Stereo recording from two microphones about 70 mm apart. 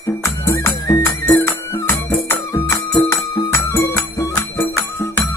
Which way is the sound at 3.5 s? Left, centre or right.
Left.